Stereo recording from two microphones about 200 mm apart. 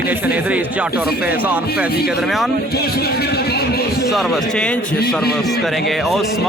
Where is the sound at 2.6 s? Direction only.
50° left (ahead or behind).